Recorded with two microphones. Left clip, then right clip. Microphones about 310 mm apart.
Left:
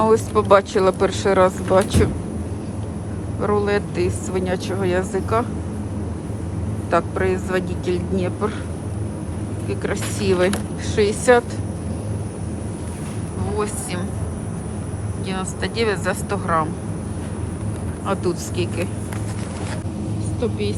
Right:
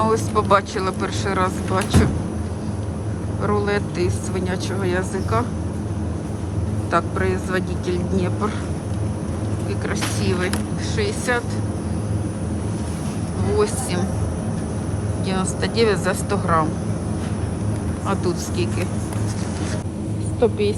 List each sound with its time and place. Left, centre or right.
0.0 s speech: centre
3.4 s speech: centre
6.9 s speech: centre
9.8 s speech: centre
15.3 s speech: centre
18.1 s speech: centre
20.4 s speech: centre